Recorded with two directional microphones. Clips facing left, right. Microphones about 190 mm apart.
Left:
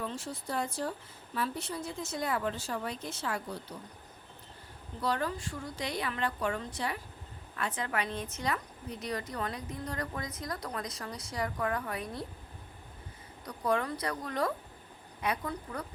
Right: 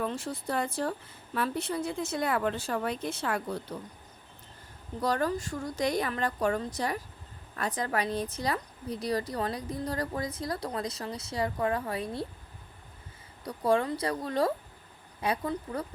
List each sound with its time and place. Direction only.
0.0 s speech: 60° right (ahead or behind)
4.9 s a woman's voice: 45° right (ahead or behind)
13.4 s speech: 30° right (ahead or behind)